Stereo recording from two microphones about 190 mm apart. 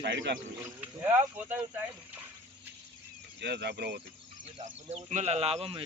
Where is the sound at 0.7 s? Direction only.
10° right (ahead or behind).